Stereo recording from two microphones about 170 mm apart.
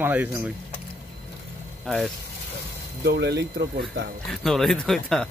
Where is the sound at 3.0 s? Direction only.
75° right (ahead or behind).